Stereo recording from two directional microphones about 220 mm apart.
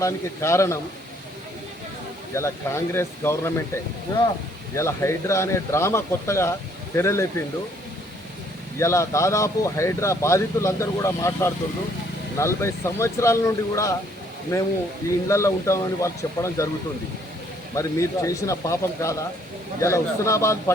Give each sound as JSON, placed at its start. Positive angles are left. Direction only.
{"t": 0.0, "sound": "speech", "side_deg": 15}
{"t": 2.3, "sound": "speech", "side_deg": 10}
{"t": 4.7, "sound": "speech", "side_deg": 10}
{"t": 8.8, "sound": "speech", "side_deg": 15}
{"t": 17.7, "sound": "speech", "side_deg": 15}